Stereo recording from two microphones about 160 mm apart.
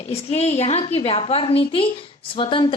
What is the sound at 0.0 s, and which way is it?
A woman's voice, 40° left (ahead or behind).